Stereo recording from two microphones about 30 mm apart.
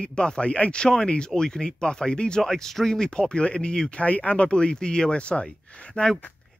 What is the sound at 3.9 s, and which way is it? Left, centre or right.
Speech, left.